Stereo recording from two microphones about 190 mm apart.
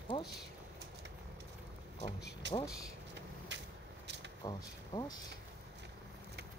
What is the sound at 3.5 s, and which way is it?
Vehicle, 65° right (ahead or behind).